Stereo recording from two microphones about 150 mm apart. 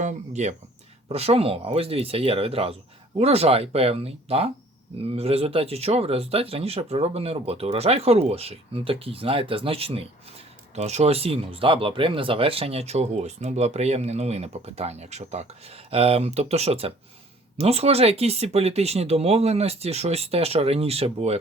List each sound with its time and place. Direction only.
0.0 s speech: 50° right (ahead or behind)